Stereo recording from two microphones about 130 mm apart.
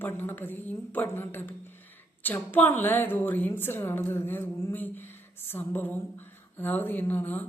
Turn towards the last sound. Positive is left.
turn(degrees=15)  # may be behind; listen again after turning